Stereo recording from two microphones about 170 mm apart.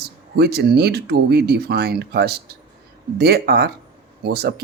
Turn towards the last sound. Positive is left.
turn(degrees=-70)  # may be behind; listen again after turning